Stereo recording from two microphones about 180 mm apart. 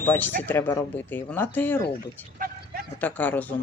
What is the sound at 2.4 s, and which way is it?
Vehicle, 55° right (ahead or behind).